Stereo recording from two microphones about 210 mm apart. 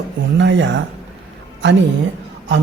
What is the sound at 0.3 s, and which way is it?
Speech, 60° right (ahead or behind).